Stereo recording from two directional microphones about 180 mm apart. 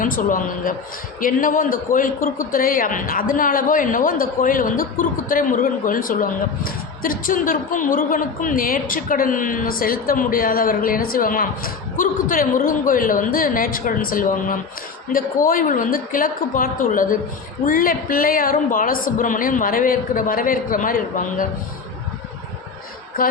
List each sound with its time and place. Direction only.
0.0 s a woman's voice: 50° left (ahead or behind)
23.2 s a woman's voice: 50° left (ahead or behind)